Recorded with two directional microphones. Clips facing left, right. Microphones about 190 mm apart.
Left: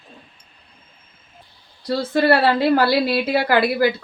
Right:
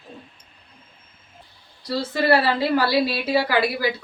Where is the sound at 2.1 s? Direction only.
60° left (ahead or behind).